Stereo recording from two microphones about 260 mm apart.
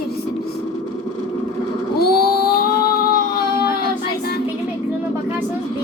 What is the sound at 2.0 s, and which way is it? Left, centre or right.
Child singing, left.